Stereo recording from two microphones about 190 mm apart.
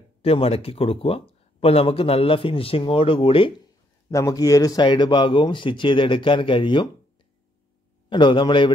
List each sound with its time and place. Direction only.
0.2 s speech: 30° left (ahead or behind)
4.1 s speech: 15° left (ahead or behind)
8.1 s speech: 25° left (ahead or behind)